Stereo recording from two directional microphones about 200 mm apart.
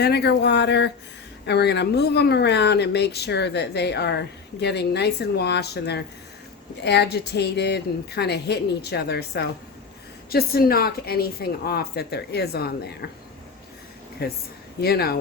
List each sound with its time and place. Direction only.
0.0 s a woman's voice: 55° left (ahead or behind)
14.2 s a woman's voice: 50° left (ahead or behind)